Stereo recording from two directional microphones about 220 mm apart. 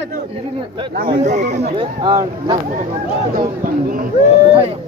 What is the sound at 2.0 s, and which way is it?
Speech, 25° right (ahead or behind).